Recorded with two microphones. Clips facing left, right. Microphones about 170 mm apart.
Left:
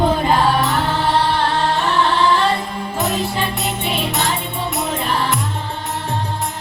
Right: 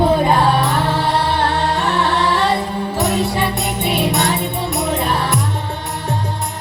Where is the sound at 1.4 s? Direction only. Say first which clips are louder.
Right 1 dB; 65° right (ahead or behind).